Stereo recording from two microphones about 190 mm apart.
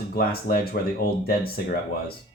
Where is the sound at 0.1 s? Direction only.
50° left (ahead or behind).